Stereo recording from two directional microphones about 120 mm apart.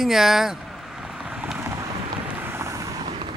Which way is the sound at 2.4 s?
20° right (ahead or behind).